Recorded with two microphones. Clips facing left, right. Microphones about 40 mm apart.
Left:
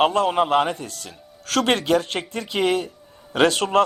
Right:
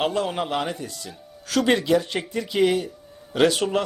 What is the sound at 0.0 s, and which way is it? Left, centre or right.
A man's voice, left.